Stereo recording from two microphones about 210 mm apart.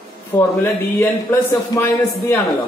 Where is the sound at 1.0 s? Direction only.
15° left (ahead or behind).